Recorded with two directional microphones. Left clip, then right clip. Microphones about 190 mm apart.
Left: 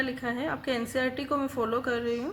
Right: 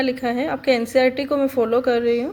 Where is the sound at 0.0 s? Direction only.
25° right (ahead or behind).